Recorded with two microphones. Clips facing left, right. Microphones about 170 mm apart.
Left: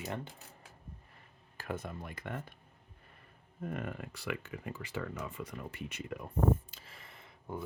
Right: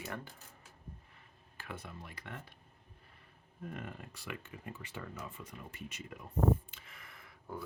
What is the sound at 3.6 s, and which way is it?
Speech, 60° left (ahead or behind).